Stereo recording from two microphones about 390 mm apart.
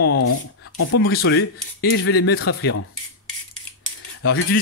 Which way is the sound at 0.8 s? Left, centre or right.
Left.